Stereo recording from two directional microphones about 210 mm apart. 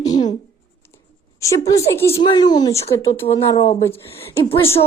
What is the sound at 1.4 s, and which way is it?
Speech, 15° left (ahead or behind).